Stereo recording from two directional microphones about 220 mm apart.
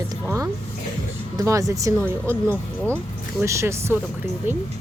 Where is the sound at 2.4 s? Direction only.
5° left (ahead or behind).